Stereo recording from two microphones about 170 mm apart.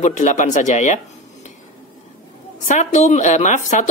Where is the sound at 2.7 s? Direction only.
45° left (ahead or behind).